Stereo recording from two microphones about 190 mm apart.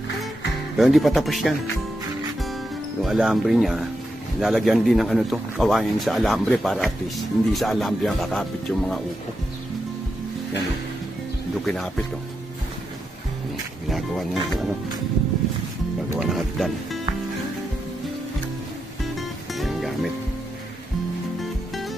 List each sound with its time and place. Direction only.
0.7 s a man's voice: centre (ahead or behind)
3.0 s a man's voice: centre (ahead or behind)
11.6 s a man's voice: centre (ahead or behind)
13.8 s a man's voice: centre (ahead or behind)
16.2 s a man's voice: centre (ahead or behind)
19.1 s music: centre (ahead or behind)